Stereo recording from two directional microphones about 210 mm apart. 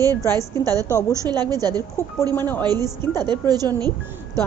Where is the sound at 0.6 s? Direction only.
15° right (ahead or behind).